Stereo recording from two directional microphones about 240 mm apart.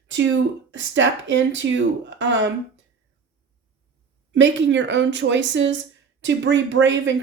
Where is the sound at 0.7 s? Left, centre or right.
Right.